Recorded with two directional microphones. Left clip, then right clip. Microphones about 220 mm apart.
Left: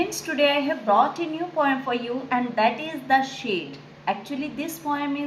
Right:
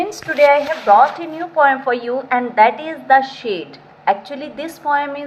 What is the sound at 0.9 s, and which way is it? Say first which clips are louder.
A woman's voice: right 9 dB; 20° right (ahead or behind).